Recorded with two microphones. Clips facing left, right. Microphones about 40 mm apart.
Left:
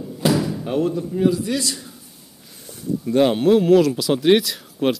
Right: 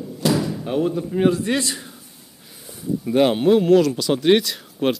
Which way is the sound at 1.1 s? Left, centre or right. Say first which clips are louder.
Right 2 dB; right.